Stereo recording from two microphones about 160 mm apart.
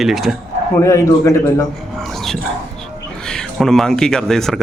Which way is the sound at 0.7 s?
20° left (ahead or behind).